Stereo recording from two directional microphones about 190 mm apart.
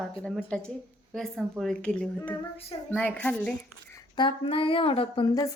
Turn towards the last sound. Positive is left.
turn(degrees=20)  # may be behind; listen again after turning